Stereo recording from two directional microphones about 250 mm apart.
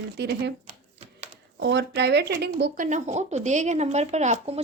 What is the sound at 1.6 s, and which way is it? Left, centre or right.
Speech, right.